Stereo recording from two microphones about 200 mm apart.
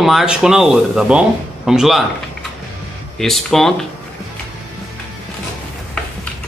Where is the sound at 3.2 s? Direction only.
Centre (ahead or behind).